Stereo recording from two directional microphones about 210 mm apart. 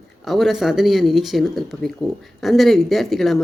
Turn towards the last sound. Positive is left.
turn(degrees=0)  # may be behind; listen again after turning